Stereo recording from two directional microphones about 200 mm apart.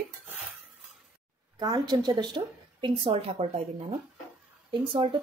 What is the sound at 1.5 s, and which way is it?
A woman's voice, 20° right (ahead or behind).